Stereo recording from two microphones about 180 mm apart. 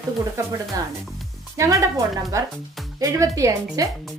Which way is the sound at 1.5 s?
15° right (ahead or behind).